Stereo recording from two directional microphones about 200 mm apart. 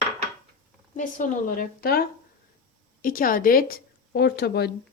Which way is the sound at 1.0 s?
40° left (ahead or behind).